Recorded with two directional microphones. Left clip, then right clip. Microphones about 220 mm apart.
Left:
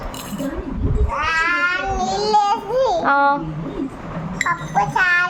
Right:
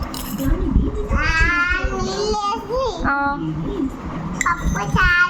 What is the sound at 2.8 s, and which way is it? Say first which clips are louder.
Speech: left 6 dB; 15° left (ahead or behind).